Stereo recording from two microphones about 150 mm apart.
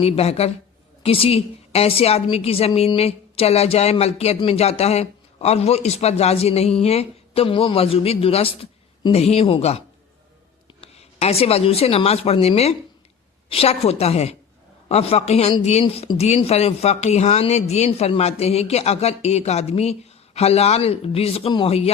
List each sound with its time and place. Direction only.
0.0 s speech: 45° left (ahead or behind)